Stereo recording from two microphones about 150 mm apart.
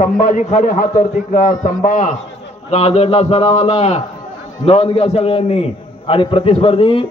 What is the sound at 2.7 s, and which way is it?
A man's voice, 45° left (ahead or behind).